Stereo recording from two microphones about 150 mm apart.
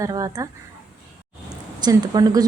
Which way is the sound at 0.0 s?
25° right (ahead or behind).